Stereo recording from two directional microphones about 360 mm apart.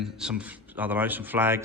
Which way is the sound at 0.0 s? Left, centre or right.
Centre.